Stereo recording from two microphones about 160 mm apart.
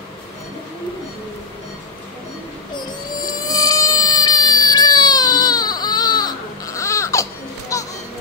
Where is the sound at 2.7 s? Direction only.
25° left (ahead or behind).